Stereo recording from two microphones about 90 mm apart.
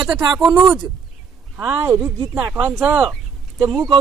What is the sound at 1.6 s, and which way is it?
Speech, 20° right (ahead or behind).